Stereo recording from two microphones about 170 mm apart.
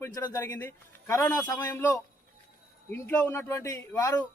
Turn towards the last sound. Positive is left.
turn(degrees=15)  # may be behind; listen again after turning